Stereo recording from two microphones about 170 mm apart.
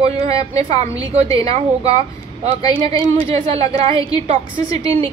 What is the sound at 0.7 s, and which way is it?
Speech, 35° right (ahead or behind).